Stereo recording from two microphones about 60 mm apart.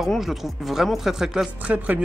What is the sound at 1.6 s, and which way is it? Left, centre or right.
Speech, right.